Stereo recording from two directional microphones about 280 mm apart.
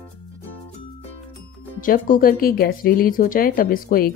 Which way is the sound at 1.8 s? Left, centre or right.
Left.